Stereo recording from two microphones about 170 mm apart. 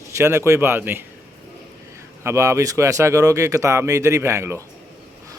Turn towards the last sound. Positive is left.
turn(degrees=-15)  # may be behind; listen again after turning